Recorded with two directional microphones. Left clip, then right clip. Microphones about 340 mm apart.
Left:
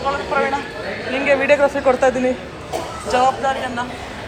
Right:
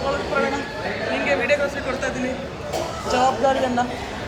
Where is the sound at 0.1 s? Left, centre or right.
Centre.